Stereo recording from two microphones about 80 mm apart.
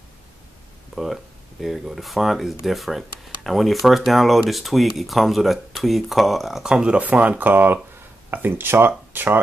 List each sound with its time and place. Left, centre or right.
0.9 s speech: centre; by 9.4 s right